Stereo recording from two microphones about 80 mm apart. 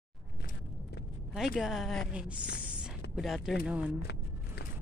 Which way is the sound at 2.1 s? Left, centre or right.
Centre.